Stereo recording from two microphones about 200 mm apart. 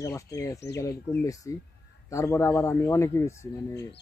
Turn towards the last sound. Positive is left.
turn(degrees=15)  # may be behind; listen again after turning